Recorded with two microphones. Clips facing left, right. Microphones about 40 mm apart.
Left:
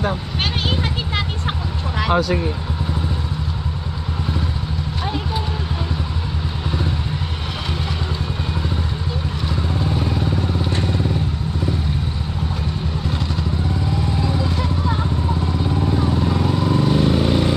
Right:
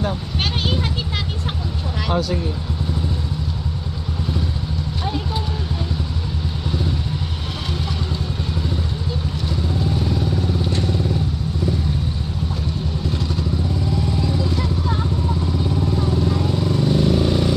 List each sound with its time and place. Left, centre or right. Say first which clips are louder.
0.3 s vehicle: left 1 dB; centre
9.5 s vehicle: even; left
16.0 s vehicle: left 1 dB; left